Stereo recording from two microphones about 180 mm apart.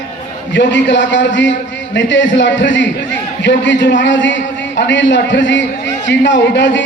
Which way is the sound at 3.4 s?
80° left.